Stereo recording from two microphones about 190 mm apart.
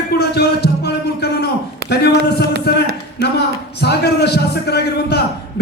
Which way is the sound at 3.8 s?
60° left (ahead or behind).